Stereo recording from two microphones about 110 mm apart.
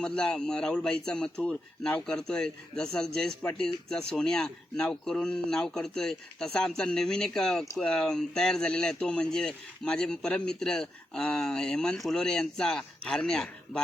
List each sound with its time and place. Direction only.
0.0 s a man's voice: 10° left (ahead or behind)